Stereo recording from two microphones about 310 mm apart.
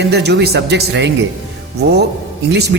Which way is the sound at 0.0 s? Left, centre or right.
Right.